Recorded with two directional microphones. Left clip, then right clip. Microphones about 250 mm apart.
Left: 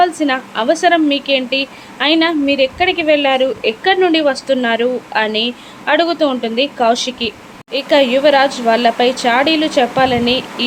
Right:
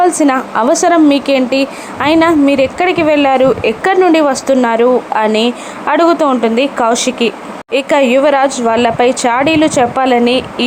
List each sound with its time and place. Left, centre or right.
0.2 s a woman's voice: centre